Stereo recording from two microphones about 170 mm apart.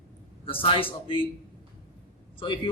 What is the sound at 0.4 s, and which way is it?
Speech, 30° left (ahead or behind).